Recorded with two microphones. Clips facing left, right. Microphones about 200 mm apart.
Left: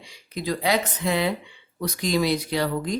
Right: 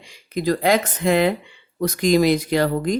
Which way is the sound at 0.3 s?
50° right (ahead or behind).